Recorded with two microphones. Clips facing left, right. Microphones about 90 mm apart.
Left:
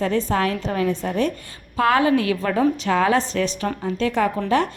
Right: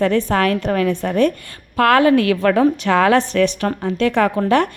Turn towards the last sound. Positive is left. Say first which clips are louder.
# right 4 dB
turn(degrees=-65)  # may be behind; listen again after turning